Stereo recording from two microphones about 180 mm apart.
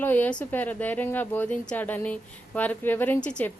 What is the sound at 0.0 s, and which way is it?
Speech, 10° left (ahead or behind).